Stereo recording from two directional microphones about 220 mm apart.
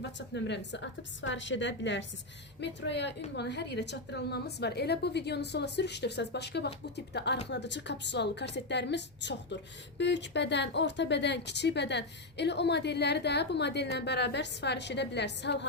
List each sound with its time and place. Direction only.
0.2 s a woman's voice: 50° left (ahead or behind)